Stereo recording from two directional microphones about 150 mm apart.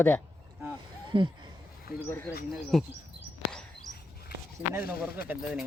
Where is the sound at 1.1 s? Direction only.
30° right (ahead or behind).